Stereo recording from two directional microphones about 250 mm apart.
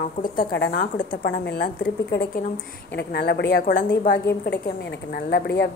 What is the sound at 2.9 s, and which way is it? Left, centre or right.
A woman's voice, left.